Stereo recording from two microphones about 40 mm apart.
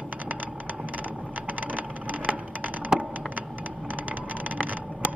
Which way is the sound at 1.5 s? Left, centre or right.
Right.